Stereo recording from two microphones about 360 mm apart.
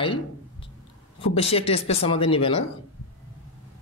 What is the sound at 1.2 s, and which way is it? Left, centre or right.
Speech, centre.